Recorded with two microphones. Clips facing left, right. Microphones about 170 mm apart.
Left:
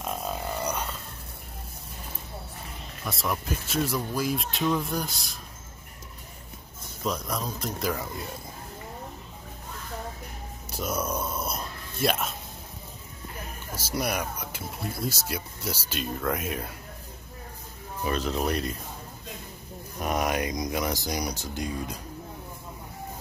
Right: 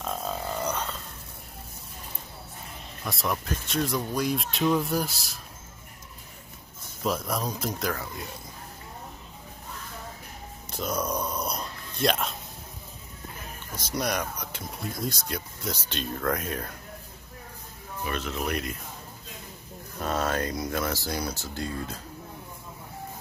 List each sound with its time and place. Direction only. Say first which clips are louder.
0.0 s a sound: even; 10° left (ahead or behind)
3.1 s speech: even; centre (ahead or behind)
7.0 s speech: right 2 dB; 5° right (ahead or behind)
10.7 s a sound: even; 5° left (ahead or behind)
13.7 s speech: even; 5° left (ahead or behind)
18.0 s speech: left 4 dB; 35° left (ahead or behind)
20.0 s speech: left 1 dB; 15° left (ahead or behind)